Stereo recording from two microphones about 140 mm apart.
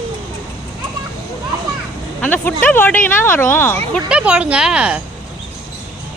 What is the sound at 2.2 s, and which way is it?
Speech, 10° left (ahead or behind).